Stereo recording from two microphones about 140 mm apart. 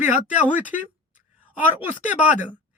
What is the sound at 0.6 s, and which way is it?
Speech, 10° right (ahead or behind).